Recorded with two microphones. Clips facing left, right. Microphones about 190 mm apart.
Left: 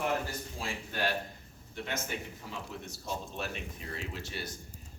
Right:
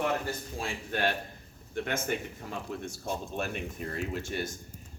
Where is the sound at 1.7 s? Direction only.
55° right (ahead or behind).